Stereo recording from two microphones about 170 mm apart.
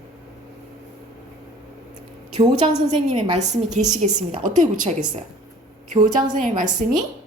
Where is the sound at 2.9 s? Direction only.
40° right (ahead or behind).